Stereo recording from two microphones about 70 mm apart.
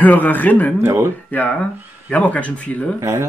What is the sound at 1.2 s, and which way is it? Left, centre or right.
Speech, left.